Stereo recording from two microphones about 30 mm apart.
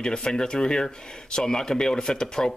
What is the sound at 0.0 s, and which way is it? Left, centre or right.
Speech, left.